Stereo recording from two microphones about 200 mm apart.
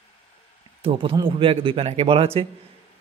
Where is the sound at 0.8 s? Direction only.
25° right (ahead or behind).